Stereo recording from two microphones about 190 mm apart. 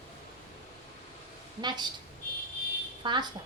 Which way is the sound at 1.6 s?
20° right (ahead or behind).